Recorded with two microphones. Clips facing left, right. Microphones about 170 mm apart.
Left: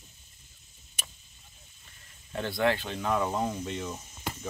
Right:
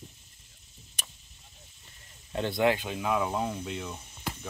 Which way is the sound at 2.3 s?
20° right (ahead or behind).